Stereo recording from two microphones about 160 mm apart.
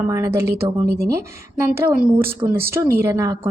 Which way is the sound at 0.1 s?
20° right (ahead or behind).